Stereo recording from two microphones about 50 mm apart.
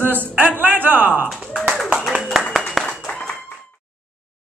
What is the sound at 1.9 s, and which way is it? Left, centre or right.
Clapping, centre.